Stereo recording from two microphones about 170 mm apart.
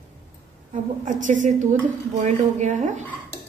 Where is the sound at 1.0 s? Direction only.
45° right (ahead or behind).